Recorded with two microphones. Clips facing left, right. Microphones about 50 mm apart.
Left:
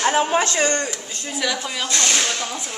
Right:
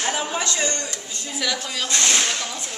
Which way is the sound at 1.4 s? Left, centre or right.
Centre.